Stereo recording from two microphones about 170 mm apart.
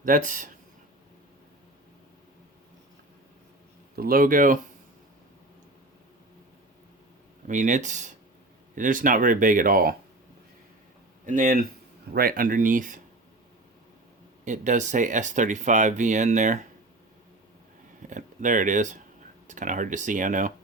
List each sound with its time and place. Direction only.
0.0 s speech: 50° right (ahead or behind)
3.9 s speech: 60° right (ahead or behind)
7.4 s speech: 50° right (ahead or behind)
11.3 s speech: 50° right (ahead or behind)
14.4 s speech: 45° right (ahead or behind)
18.1 s speech: 50° right (ahead or behind)